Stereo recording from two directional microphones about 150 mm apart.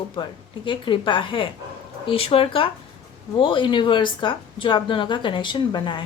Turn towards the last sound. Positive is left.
turn(degrees=30)  # may be behind; listen again after turning